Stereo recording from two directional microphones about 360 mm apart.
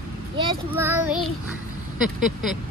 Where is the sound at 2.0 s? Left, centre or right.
Centre.